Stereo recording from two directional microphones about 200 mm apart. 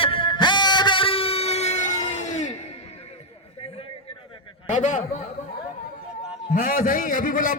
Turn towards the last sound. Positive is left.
turn(degrees=45)  # may be behind; listen again after turning